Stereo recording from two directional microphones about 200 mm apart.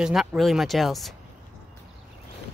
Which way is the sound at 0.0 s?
5° right (ahead or behind).